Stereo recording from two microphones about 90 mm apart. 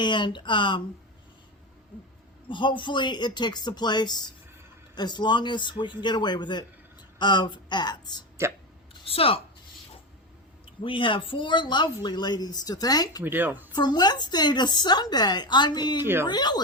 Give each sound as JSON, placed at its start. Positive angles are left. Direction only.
{"t": 0.0, "sound": "speech", "side_deg": 60}
{"t": 2.5, "sound": "speech", "side_deg": 60}
{"t": 8.4, "sound": "speech", "side_deg": -30}
{"t": 9.0, "sound": "a woman's voice", "side_deg": 90}
{"t": 10.8, "sound": "a woman's voice", "side_deg": 70}
{"t": 13.2, "sound": "speech", "side_deg": -20}
{"t": 13.7, "sound": "a woman's voice", "side_deg": 50}
{"t": 16.0, "sound": "speech", "side_deg": -25}
{"t": 16.2, "sound": "a woman's voice", "side_deg": 50}